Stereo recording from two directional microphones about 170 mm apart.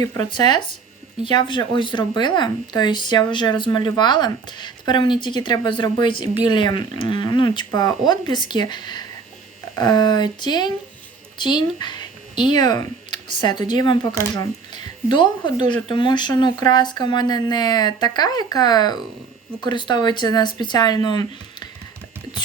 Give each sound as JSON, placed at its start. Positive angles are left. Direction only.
{"t": 0.0, "sound": "speech", "side_deg": 20}